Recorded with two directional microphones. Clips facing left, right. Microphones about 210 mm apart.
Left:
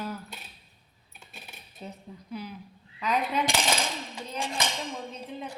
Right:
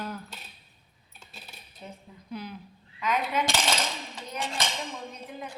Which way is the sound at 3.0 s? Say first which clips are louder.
Even; 35° left (ahead or behind).